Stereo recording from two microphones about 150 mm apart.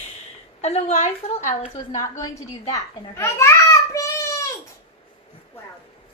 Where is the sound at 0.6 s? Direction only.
45° left (ahead or behind).